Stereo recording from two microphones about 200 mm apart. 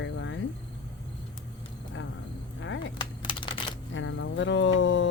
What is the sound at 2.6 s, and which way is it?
Speech, 70° left (ahead or behind).